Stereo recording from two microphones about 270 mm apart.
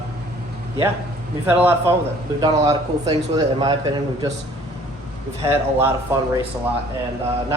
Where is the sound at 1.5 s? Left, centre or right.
Centre.